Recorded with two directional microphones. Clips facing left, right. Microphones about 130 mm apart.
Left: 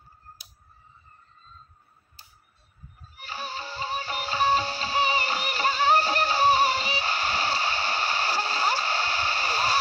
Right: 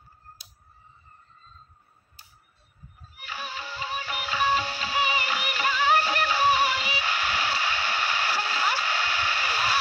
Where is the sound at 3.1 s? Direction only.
35° left (ahead or behind).